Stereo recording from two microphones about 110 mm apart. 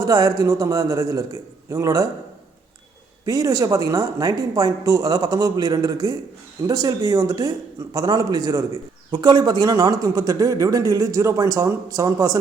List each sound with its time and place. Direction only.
0.0 s a man's voice: 30° right (ahead or behind)
3.2 s a man's voice: 30° right (ahead or behind)